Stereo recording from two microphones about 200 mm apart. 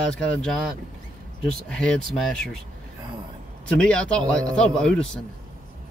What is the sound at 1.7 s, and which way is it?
Speech, 5° left (ahead or behind).